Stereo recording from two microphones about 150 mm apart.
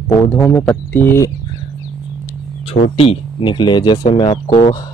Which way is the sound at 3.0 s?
35° left (ahead or behind).